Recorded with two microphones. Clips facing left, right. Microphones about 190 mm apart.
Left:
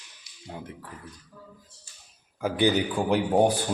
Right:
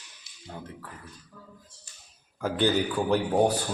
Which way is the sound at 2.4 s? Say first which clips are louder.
Left 1 dB; 10° left (ahead or behind).